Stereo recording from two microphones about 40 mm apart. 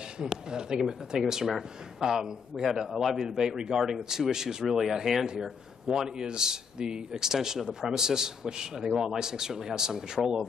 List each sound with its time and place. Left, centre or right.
0.2 s a man's voice: centre